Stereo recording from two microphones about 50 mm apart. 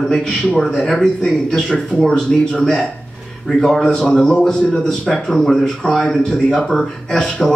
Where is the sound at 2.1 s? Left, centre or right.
Centre.